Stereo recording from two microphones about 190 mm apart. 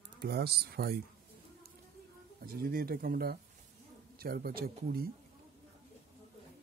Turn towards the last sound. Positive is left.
turn(degrees=-50)  # may be behind; listen again after turning